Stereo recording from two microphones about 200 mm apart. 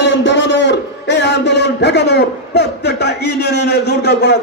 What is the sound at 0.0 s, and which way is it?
A man's voice, 65° left (ahead or behind).